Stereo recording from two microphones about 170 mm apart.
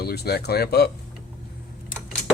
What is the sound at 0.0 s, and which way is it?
Speech, 70° left (ahead or behind).